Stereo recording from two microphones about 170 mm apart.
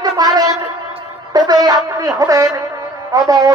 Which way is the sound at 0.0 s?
25° right (ahead or behind).